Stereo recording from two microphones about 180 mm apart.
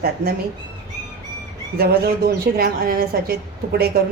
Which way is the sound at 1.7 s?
55° right (ahead or behind).